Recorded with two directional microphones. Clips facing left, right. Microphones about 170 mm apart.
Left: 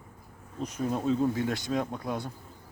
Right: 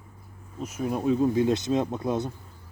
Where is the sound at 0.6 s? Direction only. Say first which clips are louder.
Right 2 dB; 10° right (ahead or behind).